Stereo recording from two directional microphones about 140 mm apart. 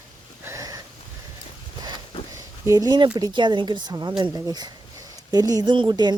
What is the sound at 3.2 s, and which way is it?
Speech, 35° right (ahead or behind).